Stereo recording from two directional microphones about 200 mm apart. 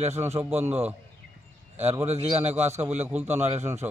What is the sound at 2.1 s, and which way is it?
A man's voice, 30° right (ahead or behind).